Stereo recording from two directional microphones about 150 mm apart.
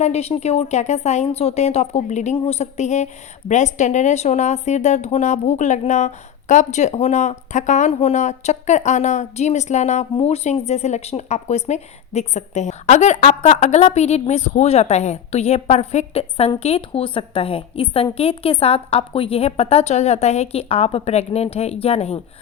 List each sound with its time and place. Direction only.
0.0 s a woman's voice: 45° left (ahead or behind)